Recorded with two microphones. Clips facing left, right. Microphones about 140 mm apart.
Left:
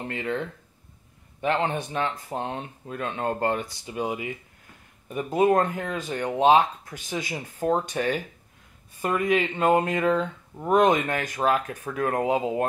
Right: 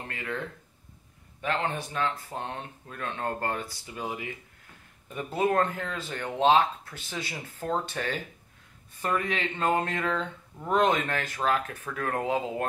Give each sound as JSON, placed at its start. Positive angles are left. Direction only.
{"t": 0.1, "sound": "speech", "side_deg": 25}
{"t": 1.4, "sound": "speech", "side_deg": 20}